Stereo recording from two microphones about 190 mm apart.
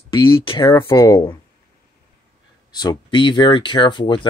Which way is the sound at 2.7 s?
20° left (ahead or behind).